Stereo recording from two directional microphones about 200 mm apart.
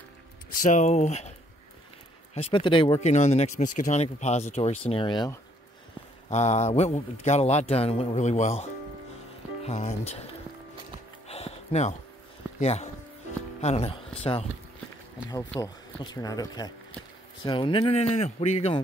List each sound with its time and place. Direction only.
0.6 s speech: 35° left (ahead or behind)
2.3 s speech: 25° left (ahead or behind)
6.3 s speech: 35° left (ahead or behind)
9.7 s speech: 35° left (ahead or behind)
11.2 s music: 30° left (ahead or behind)
12.5 s speech: 35° left (ahead or behind)
15.6 s speech: 20° left (ahead or behind)